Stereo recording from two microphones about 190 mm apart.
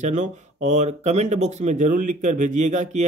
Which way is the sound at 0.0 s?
40° right (ahead or behind).